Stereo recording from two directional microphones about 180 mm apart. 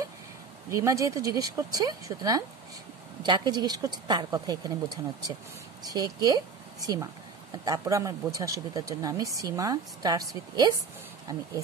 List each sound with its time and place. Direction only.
0.7 s speech: 15° right (ahead or behind)
5.9 s a woman's voice: 20° right (ahead or behind)